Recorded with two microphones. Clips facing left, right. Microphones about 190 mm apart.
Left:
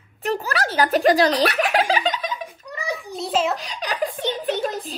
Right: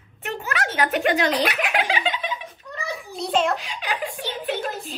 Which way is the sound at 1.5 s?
35° left (ahead or behind).